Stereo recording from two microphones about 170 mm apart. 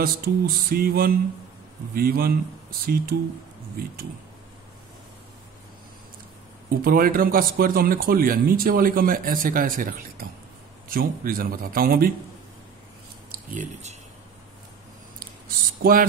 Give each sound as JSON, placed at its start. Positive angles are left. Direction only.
{"t": 0.0, "sound": "speech", "side_deg": -60}
{"t": 6.8, "sound": "speech", "side_deg": -60}
{"t": 15.8, "sound": "speech", "side_deg": -60}